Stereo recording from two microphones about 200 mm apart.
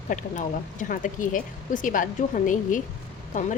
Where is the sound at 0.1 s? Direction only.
40° left (ahead or behind).